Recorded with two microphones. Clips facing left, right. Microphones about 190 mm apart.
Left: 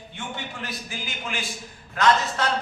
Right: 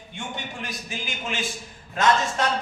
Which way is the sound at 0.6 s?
20° right (ahead or behind).